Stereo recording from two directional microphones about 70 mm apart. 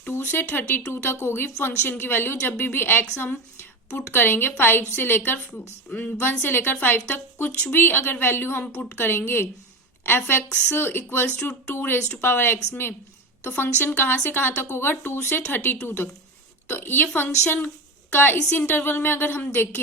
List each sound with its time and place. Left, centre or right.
0.1 s a woman's voice: left